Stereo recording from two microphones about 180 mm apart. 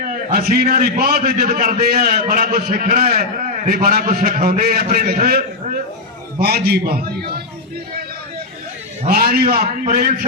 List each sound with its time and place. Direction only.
0.0 s a man's voice: 50° right (ahead or behind)
9.0 s a man's voice: 55° right (ahead or behind)
9.8 s a man's voice: 45° right (ahead or behind)